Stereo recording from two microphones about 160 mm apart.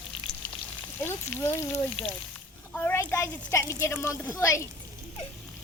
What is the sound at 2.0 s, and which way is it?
Speech, 35° left (ahead or behind).